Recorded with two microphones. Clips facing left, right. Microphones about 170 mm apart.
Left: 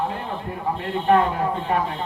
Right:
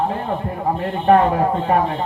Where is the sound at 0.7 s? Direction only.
40° right (ahead or behind).